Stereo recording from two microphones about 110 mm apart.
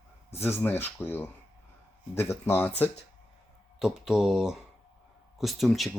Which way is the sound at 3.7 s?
5° right (ahead or behind).